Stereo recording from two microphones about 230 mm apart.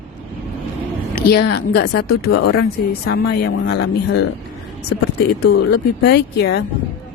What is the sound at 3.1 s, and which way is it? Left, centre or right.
Speech, left.